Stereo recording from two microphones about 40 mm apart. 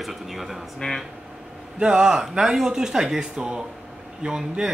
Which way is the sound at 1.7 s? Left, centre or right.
Right.